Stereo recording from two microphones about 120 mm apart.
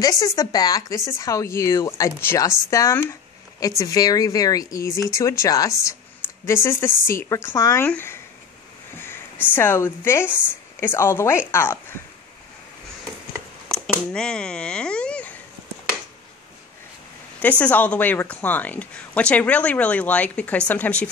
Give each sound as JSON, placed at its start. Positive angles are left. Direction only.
{"t": 0.0, "sound": "speech", "side_deg": 25}
{"t": 9.6, "sound": "speech", "side_deg": 20}
{"t": 13.7, "sound": "speech", "side_deg": 5}
{"t": 17.4, "sound": "speech", "side_deg": 10}